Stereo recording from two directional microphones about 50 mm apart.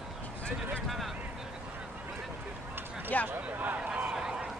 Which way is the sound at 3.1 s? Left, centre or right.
Left.